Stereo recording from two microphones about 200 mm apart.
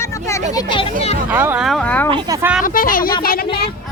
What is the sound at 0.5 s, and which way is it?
Speech, 25° left (ahead or behind).